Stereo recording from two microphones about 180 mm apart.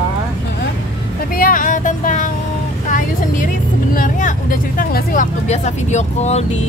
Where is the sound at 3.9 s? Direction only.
50° left (ahead or behind).